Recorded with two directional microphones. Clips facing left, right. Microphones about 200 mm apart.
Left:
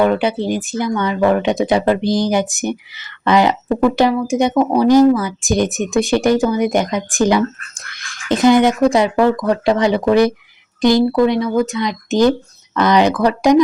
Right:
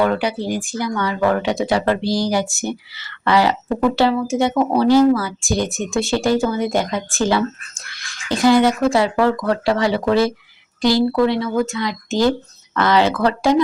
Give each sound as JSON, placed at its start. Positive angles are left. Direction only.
{"t": 0.0, "sound": "a woman's voice", "side_deg": 20}